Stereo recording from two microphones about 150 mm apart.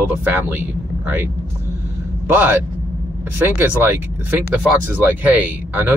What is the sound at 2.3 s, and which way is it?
Speech, 15° right (ahead or behind).